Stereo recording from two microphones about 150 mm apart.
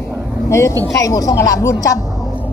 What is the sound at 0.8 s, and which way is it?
A woman's voice, 25° left (ahead or behind).